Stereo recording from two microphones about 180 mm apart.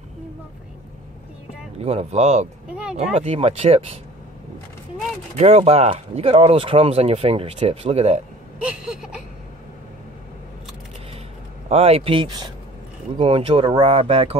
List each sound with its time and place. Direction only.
1.8 s speech: 35° right (ahead or behind)
2.7 s a sound: 5° right (ahead or behind)
3.0 s speech: 35° right (ahead or behind)
5.3 s speech: 35° right (ahead or behind)
8.6 s a sound: 5° right (ahead or behind)
11.7 s speech: 35° right (ahead or behind)